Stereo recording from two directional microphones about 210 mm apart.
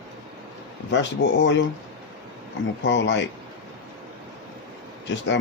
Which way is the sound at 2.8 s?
60° left (ahead or behind).